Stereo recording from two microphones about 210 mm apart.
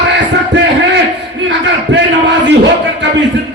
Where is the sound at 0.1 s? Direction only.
60° right (ahead or behind).